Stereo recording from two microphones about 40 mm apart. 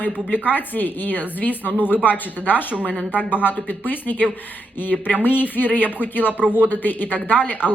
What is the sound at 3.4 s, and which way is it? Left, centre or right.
A woman's voice, left.